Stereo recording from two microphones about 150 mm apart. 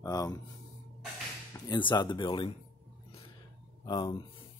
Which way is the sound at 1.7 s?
30° left (ahead or behind).